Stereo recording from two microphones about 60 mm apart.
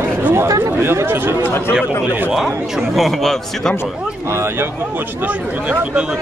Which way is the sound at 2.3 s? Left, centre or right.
Centre.